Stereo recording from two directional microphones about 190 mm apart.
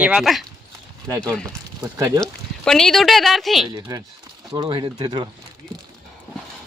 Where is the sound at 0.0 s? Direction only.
5° right (ahead or behind).